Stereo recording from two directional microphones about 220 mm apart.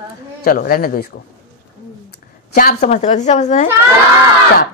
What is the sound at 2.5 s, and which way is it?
Speech, 40° left (ahead or behind).